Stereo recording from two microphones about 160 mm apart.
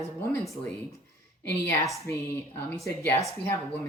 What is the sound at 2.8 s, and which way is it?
Speech, 20° left (ahead or behind).